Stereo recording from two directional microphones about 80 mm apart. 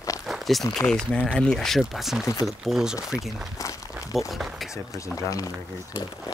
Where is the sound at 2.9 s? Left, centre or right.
Left.